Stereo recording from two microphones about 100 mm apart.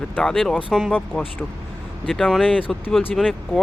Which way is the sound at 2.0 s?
Centre (ahead or behind).